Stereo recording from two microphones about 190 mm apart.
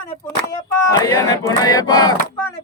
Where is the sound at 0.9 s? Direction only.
15° left (ahead or behind).